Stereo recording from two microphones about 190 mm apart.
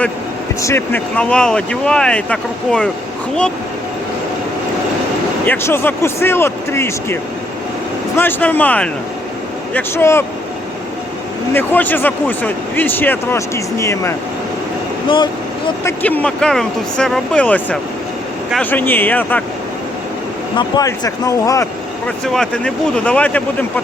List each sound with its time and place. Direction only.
0.6 s speech: 10° left (ahead or behind)
5.5 s speech: 10° left (ahead or behind)
11.5 s speech: 10° left (ahead or behind)
15.8 s speech: 10° left (ahead or behind)
20.6 s speech: 20° left (ahead or behind)
22.0 s speech: 5° left (ahead or behind)